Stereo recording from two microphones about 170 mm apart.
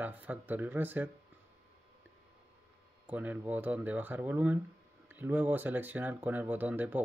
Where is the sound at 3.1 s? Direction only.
10° right (ahead or behind).